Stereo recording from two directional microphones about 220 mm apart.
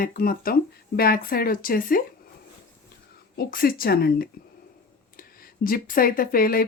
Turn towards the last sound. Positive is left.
turn(degrees=40)  # may be behind; listen again after turning